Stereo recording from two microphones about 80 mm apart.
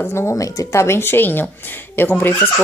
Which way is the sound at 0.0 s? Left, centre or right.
Left.